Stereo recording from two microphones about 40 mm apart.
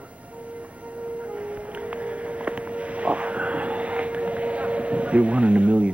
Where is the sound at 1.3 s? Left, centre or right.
Right.